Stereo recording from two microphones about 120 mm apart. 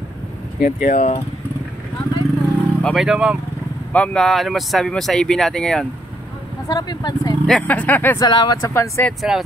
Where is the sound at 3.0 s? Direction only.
5° right (ahead or behind).